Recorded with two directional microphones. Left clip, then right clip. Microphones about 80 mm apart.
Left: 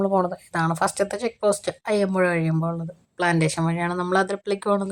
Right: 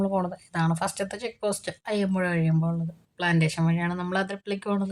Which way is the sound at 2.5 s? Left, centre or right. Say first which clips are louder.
Left 4 dB; left.